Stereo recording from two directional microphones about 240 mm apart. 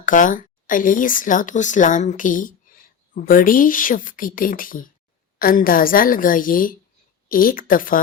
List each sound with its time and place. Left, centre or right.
0.0 s speech: left